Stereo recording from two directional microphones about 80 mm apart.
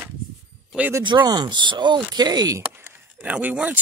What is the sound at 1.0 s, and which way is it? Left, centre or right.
Speech, right.